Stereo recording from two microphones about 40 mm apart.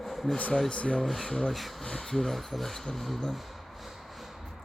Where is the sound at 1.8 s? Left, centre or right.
Centre.